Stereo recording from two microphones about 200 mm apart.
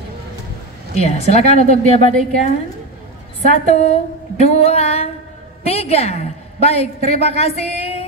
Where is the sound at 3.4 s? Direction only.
35° left (ahead or behind).